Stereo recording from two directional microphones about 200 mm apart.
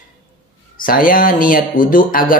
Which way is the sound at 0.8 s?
45° left (ahead or behind).